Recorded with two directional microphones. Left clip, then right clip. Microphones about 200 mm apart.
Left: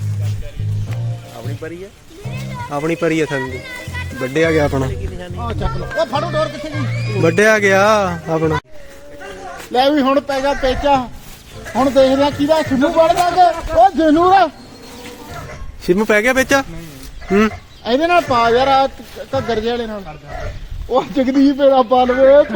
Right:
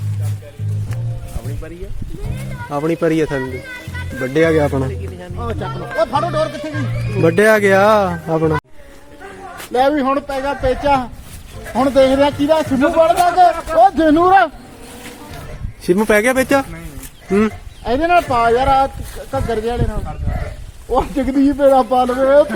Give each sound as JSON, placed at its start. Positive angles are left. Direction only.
{"t": 2.6, "sound": "speech", "side_deg": -15}
{"t": 3.4, "sound": "music", "side_deg": -55}
{"t": 4.4, "sound": "speech", "side_deg": -15}
{"t": 4.6, "sound": "speech", "side_deg": 0}
{"t": 5.5, "sound": "speech", "side_deg": 55}
{"t": 7.2, "sound": "speech", "side_deg": -10}
{"t": 9.7, "sound": "speech", "side_deg": 55}
{"t": 10.8, "sound": "speech", "side_deg": 25}
{"t": 11.8, "sound": "a man's voice", "side_deg": 10}
{"t": 15.9, "sound": "speech", "side_deg": -15}
{"t": 17.8, "sound": "speech", "side_deg": 55}